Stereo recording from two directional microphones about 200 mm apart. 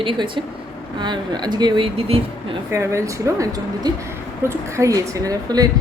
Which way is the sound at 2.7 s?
15° right (ahead or behind).